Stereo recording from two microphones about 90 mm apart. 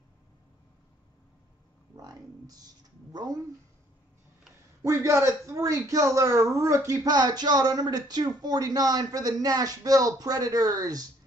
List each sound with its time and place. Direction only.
2.0 s speech: 45° right (ahead or behind)
4.8 s a man's voice: 35° right (ahead or behind)